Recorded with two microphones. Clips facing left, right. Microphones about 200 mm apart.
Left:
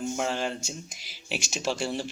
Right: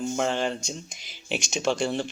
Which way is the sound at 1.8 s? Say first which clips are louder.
Right 4 dB; 55° right (ahead or behind).